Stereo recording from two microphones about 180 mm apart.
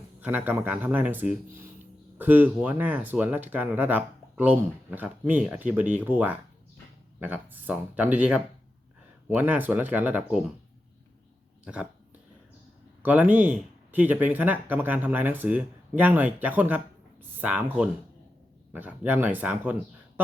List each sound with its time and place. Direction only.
0.2 s speech: 10° right (ahead or behind)
11.6 s speech: 5° right (ahead or behind)
13.0 s speech: 10° right (ahead or behind)